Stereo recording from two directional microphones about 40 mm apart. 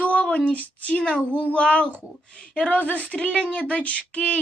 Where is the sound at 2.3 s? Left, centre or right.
Left.